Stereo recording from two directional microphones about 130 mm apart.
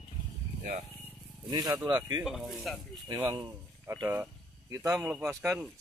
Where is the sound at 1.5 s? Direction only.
35° right (ahead or behind).